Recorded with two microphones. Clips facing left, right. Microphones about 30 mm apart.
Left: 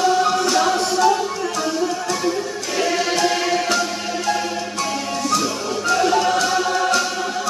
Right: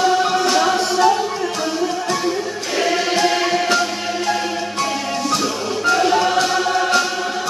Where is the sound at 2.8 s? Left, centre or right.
Right.